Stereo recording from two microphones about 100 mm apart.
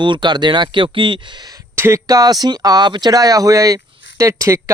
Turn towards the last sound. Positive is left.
turn(degrees=-30)  # may be behind; listen again after turning